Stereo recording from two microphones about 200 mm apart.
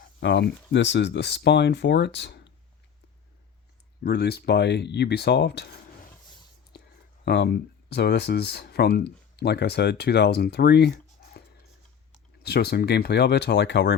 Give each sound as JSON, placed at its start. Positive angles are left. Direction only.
{"t": 0.2, "sound": "speech", "side_deg": 60}
{"t": 4.0, "sound": "speech", "side_deg": 55}
{"t": 7.3, "sound": "speech", "side_deg": 55}
{"t": 12.4, "sound": "speech", "side_deg": 50}